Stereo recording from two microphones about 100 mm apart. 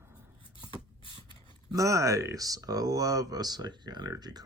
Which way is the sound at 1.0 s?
55° left (ahead or behind).